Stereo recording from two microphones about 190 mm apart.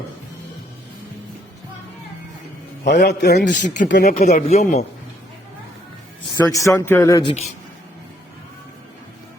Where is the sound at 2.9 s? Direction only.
60° left (ahead or behind).